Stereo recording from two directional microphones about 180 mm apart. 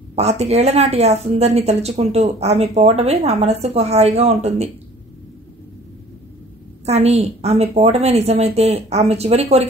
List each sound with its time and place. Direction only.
0.1 s a woman's voice: 35° right (ahead or behind)
6.9 s a woman's voice: 35° right (ahead or behind)